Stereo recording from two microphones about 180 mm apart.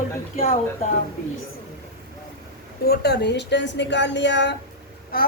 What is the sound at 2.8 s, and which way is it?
A woman's voice, 65° left (ahead or behind).